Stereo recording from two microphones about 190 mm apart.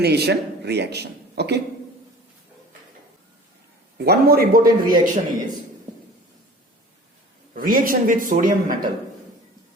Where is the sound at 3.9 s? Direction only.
55° right (ahead or behind).